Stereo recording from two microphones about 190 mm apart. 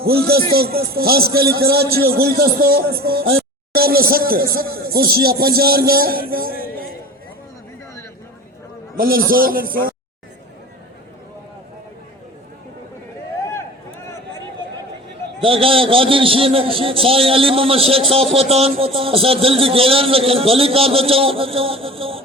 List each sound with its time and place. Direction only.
0.0 s a man's voice: 55° right (ahead or behind)
9.0 s a man's voice: 50° right (ahead or behind)
15.4 s a man's voice: 30° right (ahead or behind)